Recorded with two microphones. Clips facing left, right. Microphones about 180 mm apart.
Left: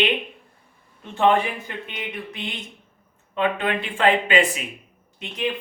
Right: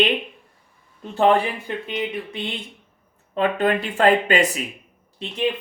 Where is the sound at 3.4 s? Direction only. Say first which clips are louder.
Right 3 dB; 40° right (ahead or behind).